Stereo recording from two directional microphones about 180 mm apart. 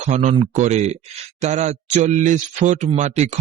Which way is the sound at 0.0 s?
40° right (ahead or behind).